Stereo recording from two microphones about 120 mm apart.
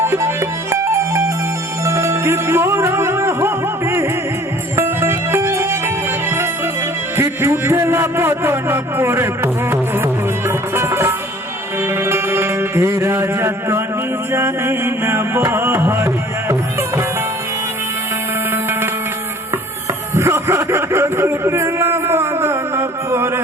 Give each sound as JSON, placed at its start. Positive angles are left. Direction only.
{"t": 0.0, "sound": "music", "side_deg": -20}
{"t": 7.2, "sound": "a man's voice", "side_deg": -20}
{"t": 10.8, "sound": "music", "side_deg": -20}
{"t": 18.5, "sound": "music", "side_deg": -20}
{"t": 20.1, "sound": "a sound", "side_deg": -20}